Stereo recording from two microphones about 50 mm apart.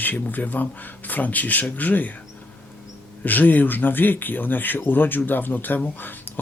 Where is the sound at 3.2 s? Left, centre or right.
Left.